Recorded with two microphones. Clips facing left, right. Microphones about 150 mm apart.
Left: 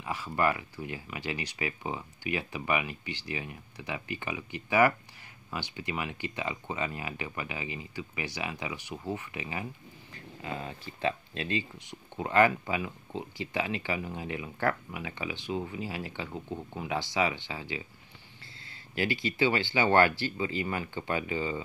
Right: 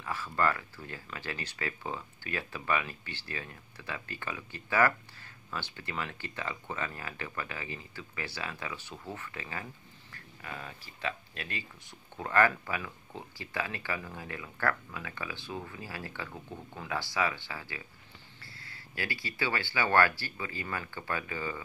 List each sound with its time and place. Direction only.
0.0 s speech: 15° left (ahead or behind)